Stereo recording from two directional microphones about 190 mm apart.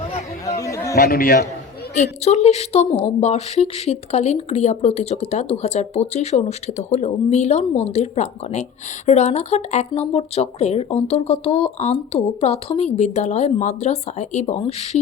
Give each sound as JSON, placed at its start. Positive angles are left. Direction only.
{"t": 0.6, "sound": "a sound", "side_deg": 15}
{"t": 0.9, "sound": "a man's voice", "side_deg": 50}
{"t": 2.0, "sound": "speech", "side_deg": 35}